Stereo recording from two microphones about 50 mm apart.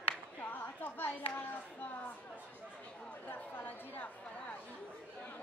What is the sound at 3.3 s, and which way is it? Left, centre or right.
Chatter, left.